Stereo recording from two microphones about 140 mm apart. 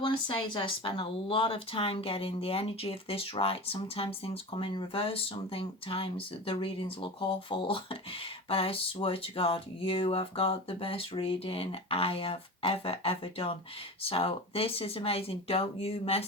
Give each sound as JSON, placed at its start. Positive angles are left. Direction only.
{"t": 0.0, "sound": "speech", "side_deg": 35}